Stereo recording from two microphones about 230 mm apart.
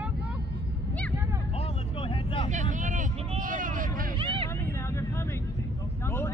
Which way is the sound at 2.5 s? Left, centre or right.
Right.